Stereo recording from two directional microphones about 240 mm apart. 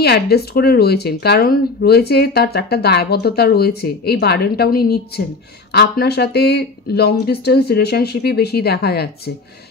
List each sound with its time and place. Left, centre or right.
0.0 s speech: left